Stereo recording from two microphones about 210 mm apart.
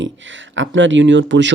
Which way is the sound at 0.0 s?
60° right (ahead or behind).